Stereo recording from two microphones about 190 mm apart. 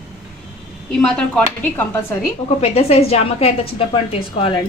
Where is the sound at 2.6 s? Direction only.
35° left (ahead or behind).